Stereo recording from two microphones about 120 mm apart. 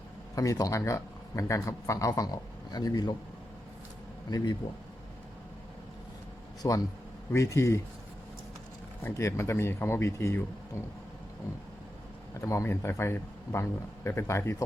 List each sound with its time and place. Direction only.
0.3 s speech: 30° left (ahead or behind)
4.3 s speech: 30° left (ahead or behind)
6.6 s speech: 30° left (ahead or behind)
9.0 s speech: 25° left (ahead or behind)
12.3 s speech: 25° left (ahead or behind)